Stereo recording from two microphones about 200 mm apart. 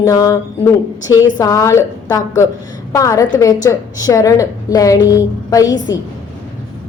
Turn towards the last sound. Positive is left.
turn(degrees=15)  # may be behind; listen again after turning